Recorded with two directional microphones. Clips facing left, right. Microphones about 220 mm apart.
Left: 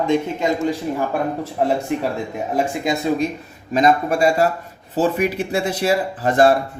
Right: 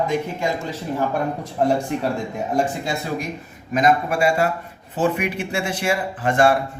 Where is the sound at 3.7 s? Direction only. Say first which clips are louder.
Left 2 dB; 35° left (ahead or behind).